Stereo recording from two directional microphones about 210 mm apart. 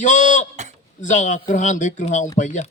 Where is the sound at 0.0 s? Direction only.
35° left (ahead or behind).